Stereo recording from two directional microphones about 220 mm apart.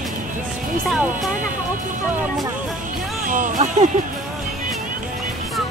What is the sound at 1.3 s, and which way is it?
Speech, 35° right (ahead or behind).